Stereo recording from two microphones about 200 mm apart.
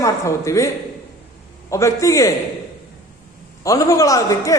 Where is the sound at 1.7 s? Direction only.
15° left (ahead or behind).